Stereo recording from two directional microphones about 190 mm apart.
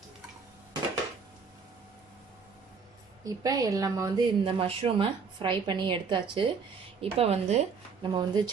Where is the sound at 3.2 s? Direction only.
20° right (ahead or behind).